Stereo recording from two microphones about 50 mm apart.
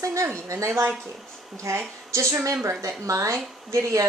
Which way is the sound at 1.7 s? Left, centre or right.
Right.